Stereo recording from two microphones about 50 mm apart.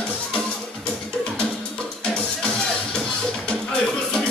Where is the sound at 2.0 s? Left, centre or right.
Left.